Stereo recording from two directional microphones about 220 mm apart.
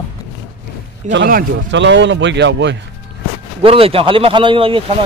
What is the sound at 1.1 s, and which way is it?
Speech, 55° right (ahead or behind).